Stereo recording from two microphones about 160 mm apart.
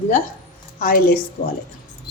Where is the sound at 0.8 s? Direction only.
65° left (ahead or behind).